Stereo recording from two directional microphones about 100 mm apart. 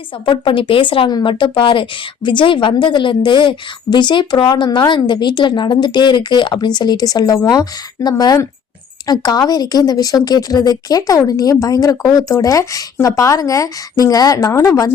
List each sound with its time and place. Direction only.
0.3 s speech: 55° left (ahead or behind); by 14.8 s 35° left (ahead or behind)